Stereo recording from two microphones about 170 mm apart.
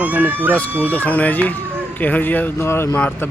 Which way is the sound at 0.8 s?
10° left (ahead or behind).